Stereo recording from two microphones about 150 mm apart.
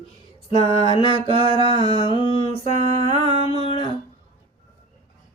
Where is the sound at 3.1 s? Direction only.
40° left (ahead or behind).